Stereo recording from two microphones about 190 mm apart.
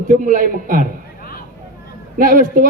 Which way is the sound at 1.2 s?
50° left (ahead or behind).